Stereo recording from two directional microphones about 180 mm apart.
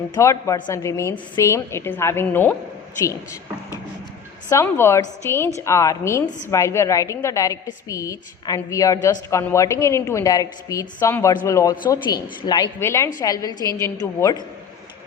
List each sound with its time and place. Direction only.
0.1 s a woman's voice: 15° left (ahead or behind)
4.4 s a woman's voice: 15° left (ahead or behind)